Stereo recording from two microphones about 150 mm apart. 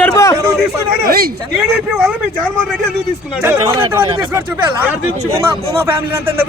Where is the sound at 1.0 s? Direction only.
80° right.